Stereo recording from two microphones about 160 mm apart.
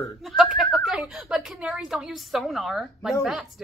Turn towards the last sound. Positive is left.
turn(degrees=0)  # may be behind; listen again after turning